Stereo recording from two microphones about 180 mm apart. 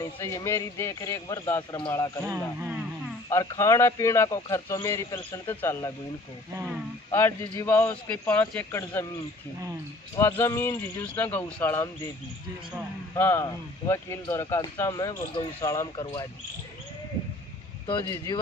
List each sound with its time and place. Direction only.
0.0 s speech: 15° left (ahead or behind)
2.2 s a man's voice: 10° right (ahead or behind)
3.2 s speech: 15° left (ahead or behind)
7.1 s speech: 15° left (ahead or behind)
10.2 s speech: 15° left (ahead or behind)
13.1 s speech: 15° left (ahead or behind)
17.8 s speech: 20° left (ahead or behind)